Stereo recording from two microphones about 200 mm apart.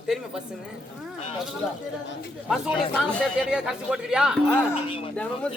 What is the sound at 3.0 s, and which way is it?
Speech, centre (ahead or behind).